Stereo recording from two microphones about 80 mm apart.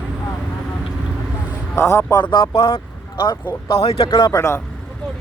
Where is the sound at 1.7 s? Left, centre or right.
Left.